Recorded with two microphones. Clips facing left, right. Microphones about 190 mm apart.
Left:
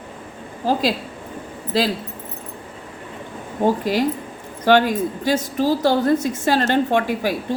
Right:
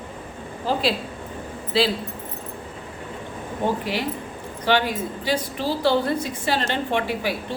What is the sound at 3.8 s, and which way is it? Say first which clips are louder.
A woman's voice: left 6 dB; 45° left (ahead or behind).